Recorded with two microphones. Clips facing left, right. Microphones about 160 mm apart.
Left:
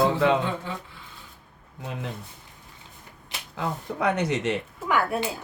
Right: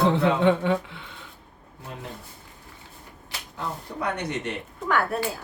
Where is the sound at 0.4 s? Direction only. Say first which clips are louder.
Right 10 dB; 70° right (ahead or behind).